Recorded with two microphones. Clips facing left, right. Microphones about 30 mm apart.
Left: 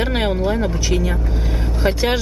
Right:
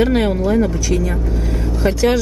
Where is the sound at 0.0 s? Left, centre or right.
Centre.